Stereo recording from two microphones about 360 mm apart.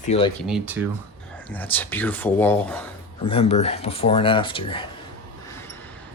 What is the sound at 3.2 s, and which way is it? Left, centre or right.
Speech, centre.